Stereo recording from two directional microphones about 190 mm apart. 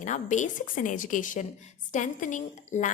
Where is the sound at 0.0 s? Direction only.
40° left (ahead or behind).